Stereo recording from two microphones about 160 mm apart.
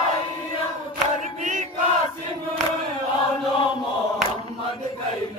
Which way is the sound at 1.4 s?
50° right (ahead or behind).